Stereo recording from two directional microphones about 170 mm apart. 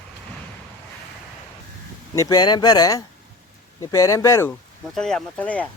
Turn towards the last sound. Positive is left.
turn(degrees=10)  # may be behind; listen again after turning